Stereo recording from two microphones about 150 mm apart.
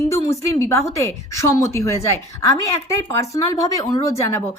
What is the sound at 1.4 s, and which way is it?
Speech, 20° left (ahead or behind).